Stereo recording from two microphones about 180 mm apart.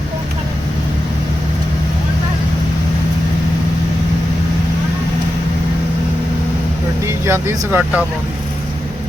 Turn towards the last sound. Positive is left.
turn(degrees=-10)  # may be behind; listen again after turning